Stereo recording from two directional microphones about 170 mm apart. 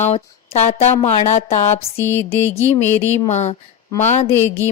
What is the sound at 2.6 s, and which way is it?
Speech, 40° left (ahead or behind).